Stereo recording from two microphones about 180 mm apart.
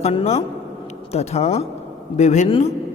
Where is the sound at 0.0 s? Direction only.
35° left (ahead or behind).